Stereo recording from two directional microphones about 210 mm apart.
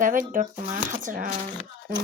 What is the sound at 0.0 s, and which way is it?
Speech, 40° right (ahead or behind).